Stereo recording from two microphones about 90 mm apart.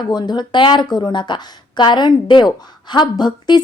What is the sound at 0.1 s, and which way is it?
Speech, 50° left (ahead or behind).